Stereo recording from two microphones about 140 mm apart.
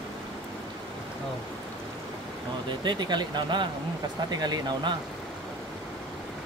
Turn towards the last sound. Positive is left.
turn(degrees=-30)  # may be behind; listen again after turning